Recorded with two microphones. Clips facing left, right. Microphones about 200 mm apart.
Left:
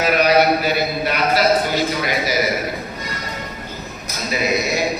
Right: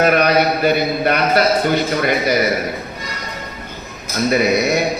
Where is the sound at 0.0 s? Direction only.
55° right (ahead or behind).